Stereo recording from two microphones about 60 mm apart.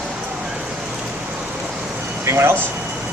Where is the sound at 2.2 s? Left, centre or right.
Right.